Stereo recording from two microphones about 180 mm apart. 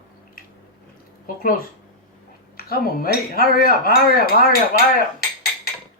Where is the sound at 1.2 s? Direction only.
50° left (ahead or behind).